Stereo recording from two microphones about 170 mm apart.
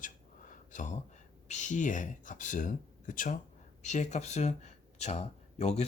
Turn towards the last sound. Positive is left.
turn(degrees=40)  # may be behind; listen again after turning